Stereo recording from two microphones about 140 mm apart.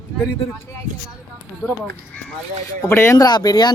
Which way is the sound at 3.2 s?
30° left (ahead or behind).